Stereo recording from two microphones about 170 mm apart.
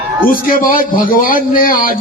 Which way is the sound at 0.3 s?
55° left (ahead or behind).